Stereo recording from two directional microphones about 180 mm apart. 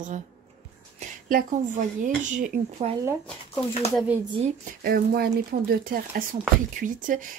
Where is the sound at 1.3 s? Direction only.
50° right (ahead or behind).